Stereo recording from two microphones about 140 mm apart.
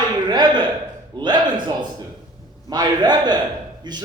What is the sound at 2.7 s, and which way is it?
A man's voice, 30° right (ahead or behind).